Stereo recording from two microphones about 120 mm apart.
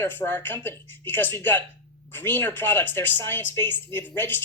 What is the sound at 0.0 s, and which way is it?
Speech, 15° left (ahead or behind).